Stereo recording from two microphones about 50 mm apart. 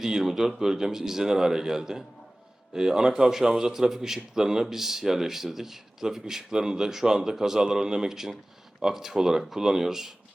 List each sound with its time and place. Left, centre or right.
0.0 s a man's voice: centre